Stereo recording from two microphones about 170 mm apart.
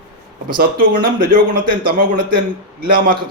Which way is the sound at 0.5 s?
60° right (ahead or behind).